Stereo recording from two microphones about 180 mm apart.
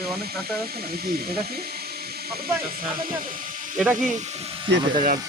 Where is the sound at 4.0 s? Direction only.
40° right (ahead or behind).